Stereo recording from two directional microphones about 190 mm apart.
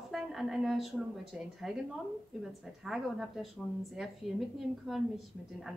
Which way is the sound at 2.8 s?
Centre (ahead or behind).